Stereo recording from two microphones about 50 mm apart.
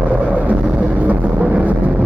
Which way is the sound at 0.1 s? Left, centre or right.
Right.